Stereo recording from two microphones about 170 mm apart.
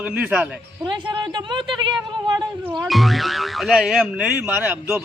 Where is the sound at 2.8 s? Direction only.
Centre (ahead or behind).